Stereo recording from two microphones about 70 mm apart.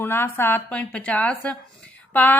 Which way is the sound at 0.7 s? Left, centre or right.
Centre.